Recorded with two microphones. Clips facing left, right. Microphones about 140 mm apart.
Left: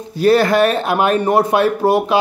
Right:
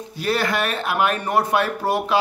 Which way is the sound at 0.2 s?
35° left (ahead or behind).